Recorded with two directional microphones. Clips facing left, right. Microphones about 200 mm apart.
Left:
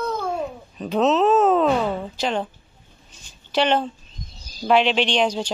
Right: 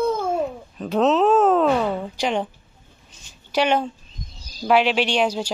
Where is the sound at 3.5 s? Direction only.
10° right (ahead or behind).